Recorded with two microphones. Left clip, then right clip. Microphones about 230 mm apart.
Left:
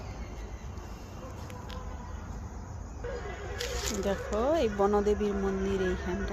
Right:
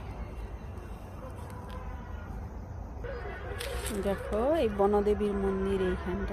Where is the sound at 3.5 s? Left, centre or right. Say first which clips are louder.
Left 3 dB; centre.